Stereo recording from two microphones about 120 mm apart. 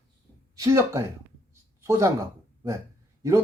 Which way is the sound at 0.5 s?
30° right (ahead or behind).